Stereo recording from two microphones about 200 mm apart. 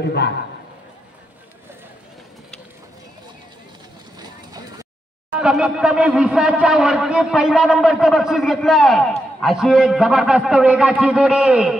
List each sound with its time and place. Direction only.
0.0 s a man's voice: 55° left (ahead or behind)
4.2 s vehicle: 20° right (ahead or behind)
5.3 s speech: 5° right (ahead or behind)